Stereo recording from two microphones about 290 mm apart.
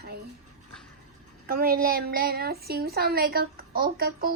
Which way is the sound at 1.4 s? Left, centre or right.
Right.